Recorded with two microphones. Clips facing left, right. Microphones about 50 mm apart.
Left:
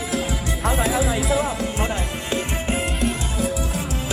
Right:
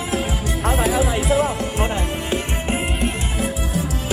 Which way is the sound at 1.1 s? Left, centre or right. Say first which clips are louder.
Right 3 dB; right.